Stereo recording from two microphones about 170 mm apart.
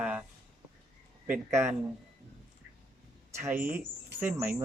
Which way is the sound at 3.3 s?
15° right (ahead or behind).